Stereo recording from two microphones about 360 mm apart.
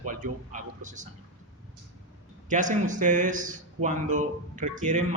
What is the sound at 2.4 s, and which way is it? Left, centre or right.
Speech, right.